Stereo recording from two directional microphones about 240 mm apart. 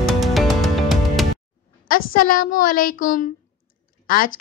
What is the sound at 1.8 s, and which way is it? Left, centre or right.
Speech, left.